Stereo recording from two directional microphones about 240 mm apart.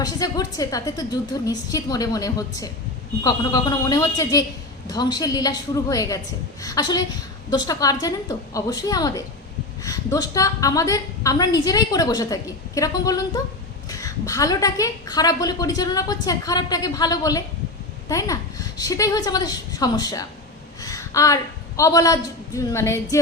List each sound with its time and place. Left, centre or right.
0.0 s a woman's voice: centre